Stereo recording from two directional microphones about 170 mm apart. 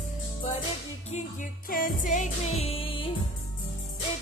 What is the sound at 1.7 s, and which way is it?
Music, 55° left (ahead or behind).